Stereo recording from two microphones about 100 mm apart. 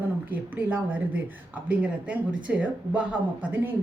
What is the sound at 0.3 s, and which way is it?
Speech, 15° right (ahead or behind).